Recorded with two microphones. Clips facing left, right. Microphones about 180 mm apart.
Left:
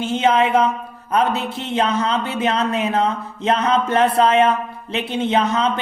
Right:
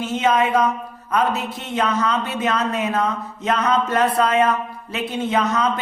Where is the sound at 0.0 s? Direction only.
25° left (ahead or behind).